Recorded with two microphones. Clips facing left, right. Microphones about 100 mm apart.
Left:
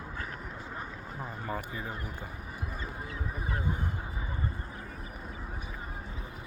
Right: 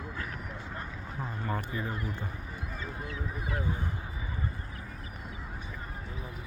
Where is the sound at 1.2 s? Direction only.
5° left (ahead or behind).